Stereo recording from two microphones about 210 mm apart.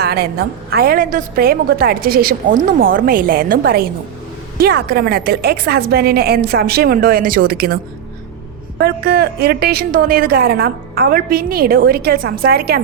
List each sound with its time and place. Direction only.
0.0 s a woman's voice: 50° right (ahead or behind)
8.8 s a woman's voice: 50° right (ahead or behind)